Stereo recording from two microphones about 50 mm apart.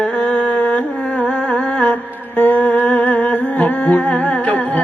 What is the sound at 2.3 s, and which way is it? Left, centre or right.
Music, left.